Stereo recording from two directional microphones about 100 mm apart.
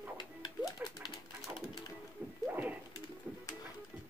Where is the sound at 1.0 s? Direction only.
55° left (ahead or behind).